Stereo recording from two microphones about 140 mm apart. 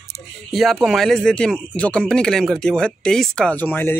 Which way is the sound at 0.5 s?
Centre (ahead or behind).